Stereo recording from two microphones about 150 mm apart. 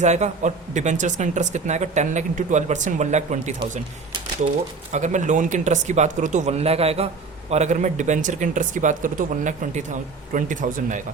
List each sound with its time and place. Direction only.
0.0 s speech: 50° right (ahead or behind)
4.9 s speech: 55° right (ahead or behind)